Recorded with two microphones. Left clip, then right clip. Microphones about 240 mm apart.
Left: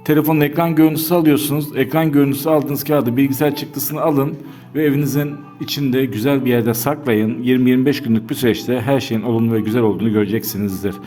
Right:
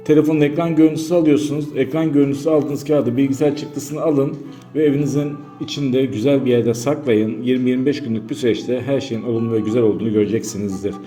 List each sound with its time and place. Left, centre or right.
0.1 s a man's voice: left